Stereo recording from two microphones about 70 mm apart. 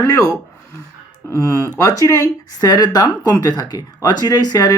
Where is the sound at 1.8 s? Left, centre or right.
Left.